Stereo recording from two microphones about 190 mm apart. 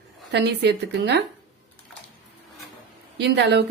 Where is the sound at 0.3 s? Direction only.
65° right (ahead or behind).